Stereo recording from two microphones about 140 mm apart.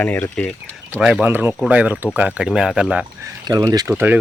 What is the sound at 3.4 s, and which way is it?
Speech, 30° right (ahead or behind).